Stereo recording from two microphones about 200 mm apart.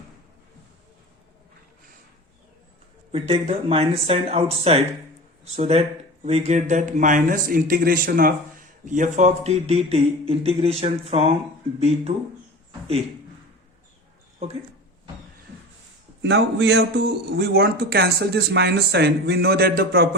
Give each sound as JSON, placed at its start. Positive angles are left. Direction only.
{"t": 3.1, "sound": "speech", "side_deg": -30}
{"t": 16.2, "sound": "a man's voice", "side_deg": -60}